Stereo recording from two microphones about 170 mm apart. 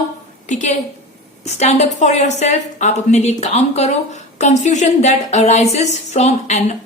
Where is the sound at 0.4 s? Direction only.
45° left (ahead or behind).